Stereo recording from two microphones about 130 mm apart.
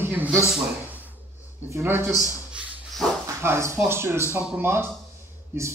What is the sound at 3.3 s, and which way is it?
A man's voice, 20° right (ahead or behind).